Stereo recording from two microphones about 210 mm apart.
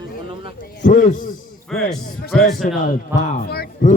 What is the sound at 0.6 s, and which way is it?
A man's voice, 40° left (ahead or behind).